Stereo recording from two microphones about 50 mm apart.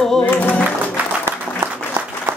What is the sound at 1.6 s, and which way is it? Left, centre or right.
Applause, right.